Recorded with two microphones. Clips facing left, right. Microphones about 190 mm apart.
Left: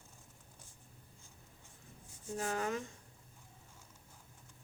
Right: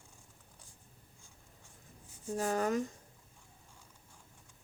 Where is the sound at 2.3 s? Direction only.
40° right (ahead or behind).